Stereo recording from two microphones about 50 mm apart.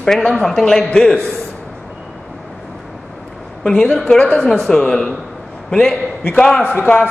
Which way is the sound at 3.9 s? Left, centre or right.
Centre.